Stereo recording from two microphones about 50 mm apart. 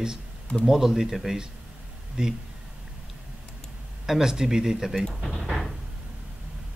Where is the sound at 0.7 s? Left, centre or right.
Centre.